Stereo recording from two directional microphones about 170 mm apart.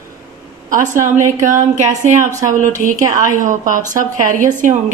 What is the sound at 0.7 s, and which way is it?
Speech, 50° right (ahead or behind).